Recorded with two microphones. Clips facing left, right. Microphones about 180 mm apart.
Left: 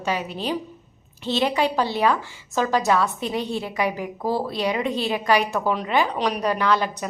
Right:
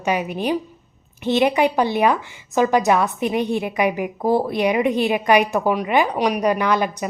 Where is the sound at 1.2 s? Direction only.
15° right (ahead or behind).